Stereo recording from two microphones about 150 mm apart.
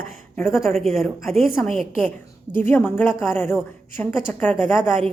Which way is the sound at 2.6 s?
15° left (ahead or behind).